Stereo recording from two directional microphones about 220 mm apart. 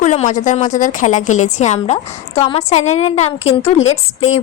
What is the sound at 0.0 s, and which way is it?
A woman's voice, 35° left (ahead or behind).